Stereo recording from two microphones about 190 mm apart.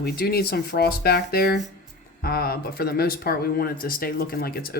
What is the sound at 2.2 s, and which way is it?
Speech, 55° left (ahead or behind).